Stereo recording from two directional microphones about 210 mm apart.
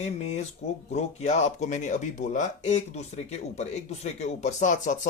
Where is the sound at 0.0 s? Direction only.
35° left (ahead or behind).